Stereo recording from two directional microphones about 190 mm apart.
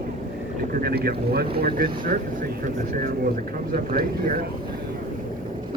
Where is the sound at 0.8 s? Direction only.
55° right (ahead or behind).